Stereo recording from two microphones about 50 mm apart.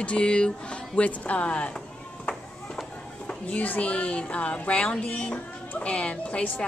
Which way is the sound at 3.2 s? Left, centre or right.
Left.